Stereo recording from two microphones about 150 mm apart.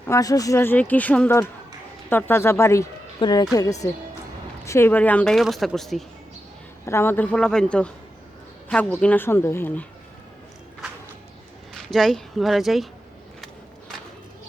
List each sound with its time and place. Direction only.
0.0 s a woman's voice: 20° left (ahead or behind); by 6.1 s centre (ahead or behind)
6.8 s speech: 15° left (ahead or behind)
11.7 s speech: centre (ahead or behind)